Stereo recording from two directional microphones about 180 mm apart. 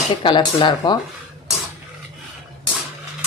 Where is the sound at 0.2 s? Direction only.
25° left (ahead or behind).